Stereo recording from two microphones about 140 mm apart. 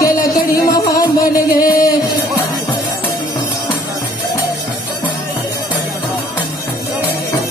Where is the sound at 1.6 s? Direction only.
90° left.